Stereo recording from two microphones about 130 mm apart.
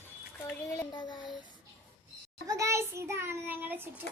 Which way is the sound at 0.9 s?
35° left (ahead or behind).